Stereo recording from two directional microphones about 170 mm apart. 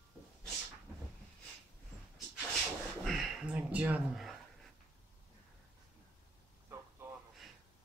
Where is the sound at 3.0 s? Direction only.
Centre (ahead or behind).